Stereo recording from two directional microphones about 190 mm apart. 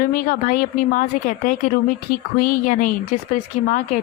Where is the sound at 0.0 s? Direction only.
45° left (ahead or behind).